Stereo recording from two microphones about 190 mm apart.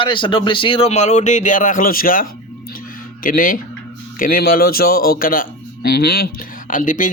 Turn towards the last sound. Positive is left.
turn(degrees=40)  # may be behind; listen again after turning